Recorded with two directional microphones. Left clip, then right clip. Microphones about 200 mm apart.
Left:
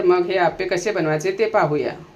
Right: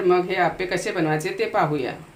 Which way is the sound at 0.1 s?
25° left (ahead or behind).